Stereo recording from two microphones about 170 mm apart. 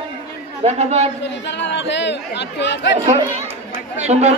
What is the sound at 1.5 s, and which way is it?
Speech, 90° left.